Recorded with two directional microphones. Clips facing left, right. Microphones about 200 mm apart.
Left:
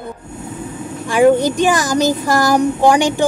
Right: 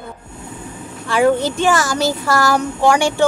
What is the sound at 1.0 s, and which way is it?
A child's voice, 15° left (ahead or behind).